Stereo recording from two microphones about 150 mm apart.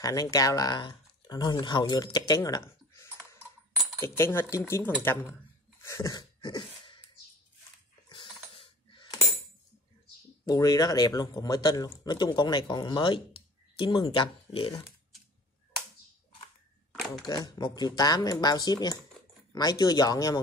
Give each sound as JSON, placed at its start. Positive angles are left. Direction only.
{"t": 0.0, "sound": "speech", "side_deg": 25}
{"t": 5.8, "sound": "a sound", "side_deg": 20}
{"t": 8.1, "sound": "coin", "side_deg": 35}
{"t": 10.4, "sound": "speech", "side_deg": 25}
{"t": 17.2, "sound": "speech", "side_deg": 25}